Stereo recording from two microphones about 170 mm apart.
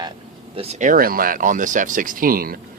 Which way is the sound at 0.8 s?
55° right (ahead or behind).